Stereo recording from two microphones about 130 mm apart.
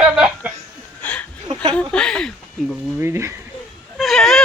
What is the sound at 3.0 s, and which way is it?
Speech, 20° right (ahead or behind).